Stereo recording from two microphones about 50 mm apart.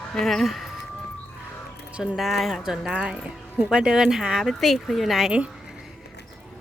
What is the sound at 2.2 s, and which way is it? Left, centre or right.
A woman's voice, centre.